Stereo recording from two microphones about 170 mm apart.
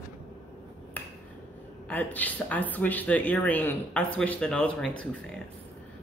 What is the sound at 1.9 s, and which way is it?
Speech, 10° left (ahead or behind).